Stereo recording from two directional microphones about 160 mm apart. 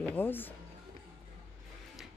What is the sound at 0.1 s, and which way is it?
Speech, 10° left (ahead or behind).